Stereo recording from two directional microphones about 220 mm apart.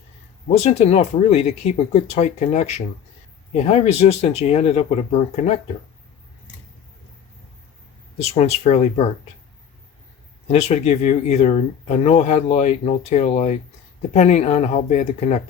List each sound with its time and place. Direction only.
0.4 s speech: 30° left (ahead or behind)
8.2 s speech: 30° left (ahead or behind)
10.5 s speech: 30° left (ahead or behind)